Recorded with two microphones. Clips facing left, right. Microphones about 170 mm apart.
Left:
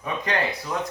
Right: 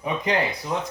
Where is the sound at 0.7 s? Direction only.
20° right (ahead or behind).